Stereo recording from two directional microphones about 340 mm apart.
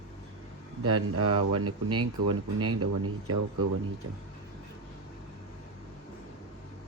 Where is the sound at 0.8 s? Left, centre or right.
Right.